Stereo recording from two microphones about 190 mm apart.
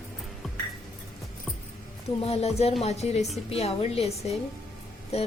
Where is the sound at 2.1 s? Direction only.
30° left (ahead or behind).